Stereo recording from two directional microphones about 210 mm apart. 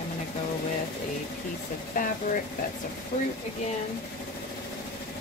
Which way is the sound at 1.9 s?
40° left (ahead or behind).